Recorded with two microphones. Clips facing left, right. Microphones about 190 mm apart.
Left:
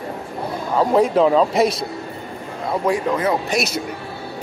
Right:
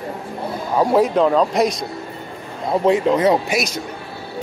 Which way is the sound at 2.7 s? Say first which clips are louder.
Right 4 dB; 25° right (ahead or behind).